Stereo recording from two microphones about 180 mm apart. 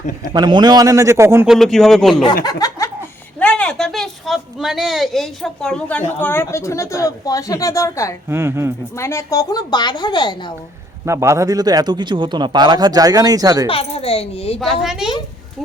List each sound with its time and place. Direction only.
0.3 s a man's voice: 25° right (ahead or behind)
1.5 s a man's voice: centre (ahead or behind)
2.4 s a sound: 20° left (ahead or behind)
3.4 s speech: 5° left (ahead or behind)
8.3 s speech: 15° right (ahead or behind)
9.0 s a woman's voice: 15° left (ahead or behind)
11.0 s a man's voice: 15° right (ahead or behind)
13.7 s a child's voice: 30° left (ahead or behind)
14.6 s a man's voice: centre (ahead or behind)